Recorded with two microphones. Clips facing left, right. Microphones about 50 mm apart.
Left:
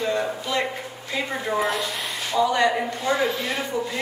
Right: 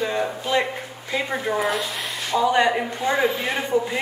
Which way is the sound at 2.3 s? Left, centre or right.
Centre.